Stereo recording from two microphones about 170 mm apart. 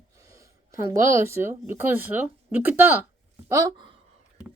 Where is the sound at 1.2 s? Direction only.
15° right (ahead or behind).